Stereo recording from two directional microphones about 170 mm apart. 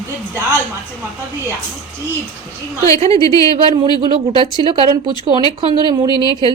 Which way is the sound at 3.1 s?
20° left (ahead or behind).